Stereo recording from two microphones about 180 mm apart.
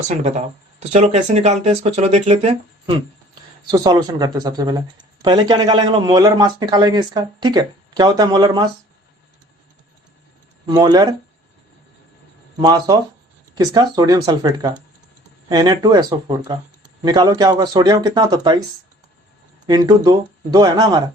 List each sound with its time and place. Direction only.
0.2 s a man's voice: 40° right (ahead or behind); by 8.6 s 25° right (ahead or behind)
10.7 s a man's voice: 20° right (ahead or behind)
12.5 s a man's voice: 25° right (ahead or behind)
19.6 s a man's voice: 20° right (ahead or behind)